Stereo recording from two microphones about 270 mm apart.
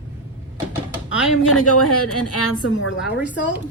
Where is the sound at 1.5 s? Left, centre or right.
Left.